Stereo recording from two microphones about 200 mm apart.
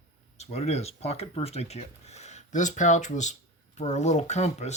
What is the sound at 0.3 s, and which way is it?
Speech, 30° left (ahead or behind).